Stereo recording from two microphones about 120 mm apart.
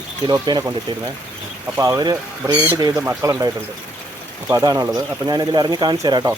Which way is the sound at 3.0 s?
20° right (ahead or behind).